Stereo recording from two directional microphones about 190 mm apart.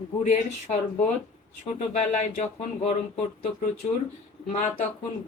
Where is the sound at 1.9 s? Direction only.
40° left (ahead or behind).